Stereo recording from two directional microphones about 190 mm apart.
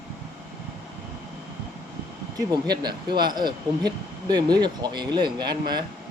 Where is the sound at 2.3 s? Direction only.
20° right (ahead or behind).